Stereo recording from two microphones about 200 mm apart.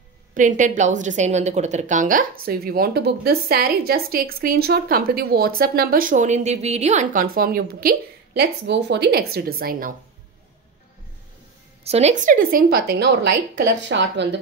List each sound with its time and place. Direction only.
0.3 s a woman's voice: 40° right (ahead or behind)
11.8 s a woman's voice: 30° right (ahead or behind); by 14.4 s 60° right (ahead or behind)